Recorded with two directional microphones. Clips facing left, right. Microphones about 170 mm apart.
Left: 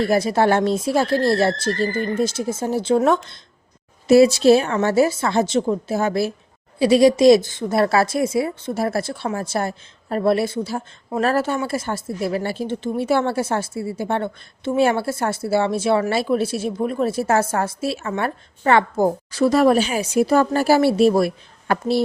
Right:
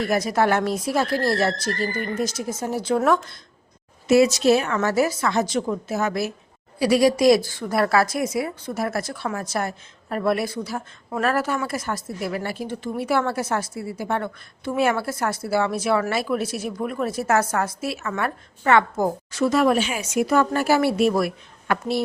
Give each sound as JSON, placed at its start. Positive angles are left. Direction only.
{"t": 0.0, "sound": "speech", "side_deg": 30}